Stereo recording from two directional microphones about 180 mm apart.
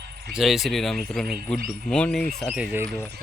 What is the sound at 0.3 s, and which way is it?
Speech, centre (ahead or behind).